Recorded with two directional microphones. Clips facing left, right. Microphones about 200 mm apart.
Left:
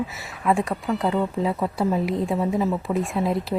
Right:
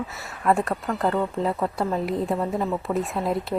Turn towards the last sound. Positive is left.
turn(degrees=0)  # may be behind; listen again after turning